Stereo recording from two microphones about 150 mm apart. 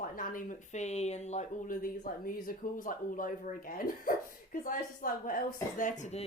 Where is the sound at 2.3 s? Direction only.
70° left (ahead or behind).